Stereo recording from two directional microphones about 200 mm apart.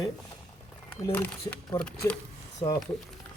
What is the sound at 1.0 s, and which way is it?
Speech, 5° left (ahead or behind).